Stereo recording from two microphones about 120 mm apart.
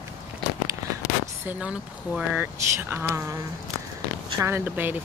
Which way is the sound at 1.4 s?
10° right (ahead or behind).